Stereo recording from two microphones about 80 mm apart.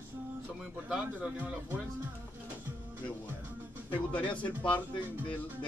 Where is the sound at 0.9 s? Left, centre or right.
Centre.